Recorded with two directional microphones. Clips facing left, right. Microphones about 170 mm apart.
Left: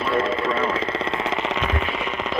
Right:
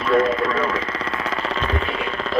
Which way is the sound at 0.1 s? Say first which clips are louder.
Right 5 dB; 30° left (ahead or behind).